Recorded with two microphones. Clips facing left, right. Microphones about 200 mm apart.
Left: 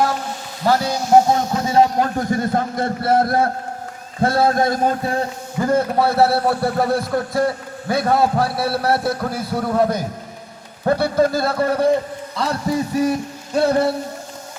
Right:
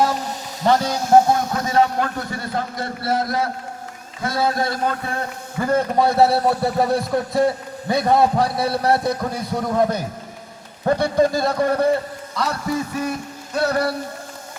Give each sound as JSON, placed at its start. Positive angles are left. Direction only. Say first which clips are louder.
{"t": 0.6, "sound": "a man's voice", "louder": "even", "side_deg": 10}
{"t": 1.3, "sound": "a man's voice", "louder": "left 2 dB", "side_deg": 25}
{"t": 5.5, "sound": "a man's voice", "louder": "left 1 dB", "side_deg": 10}
{"t": 13.0, "sound": "music", "louder": "left 6 dB", "side_deg": 35}